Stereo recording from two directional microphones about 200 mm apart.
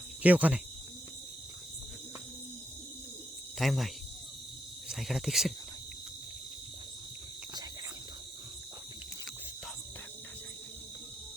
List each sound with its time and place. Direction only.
0.2 s speech: 5° right (ahead or behind)
3.6 s speech: centre (ahead or behind)